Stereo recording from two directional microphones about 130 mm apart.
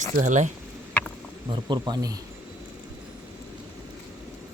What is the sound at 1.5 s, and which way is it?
Speech, 35° right (ahead or behind).